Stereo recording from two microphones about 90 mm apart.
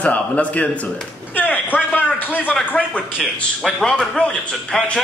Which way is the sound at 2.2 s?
20° left (ahead or behind).